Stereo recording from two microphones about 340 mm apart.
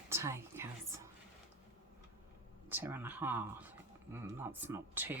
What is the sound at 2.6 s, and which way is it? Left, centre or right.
Speech, centre.